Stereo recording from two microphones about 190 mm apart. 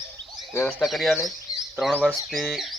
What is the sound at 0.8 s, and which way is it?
Speech, centre (ahead or behind).